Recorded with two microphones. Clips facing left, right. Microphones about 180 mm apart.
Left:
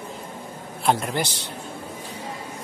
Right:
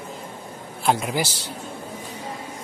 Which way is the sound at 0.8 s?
Centre (ahead or behind).